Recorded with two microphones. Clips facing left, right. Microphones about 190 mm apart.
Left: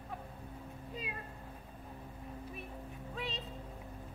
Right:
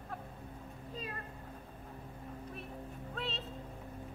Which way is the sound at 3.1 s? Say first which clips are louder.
Right 1 dB; centre (ahead or behind).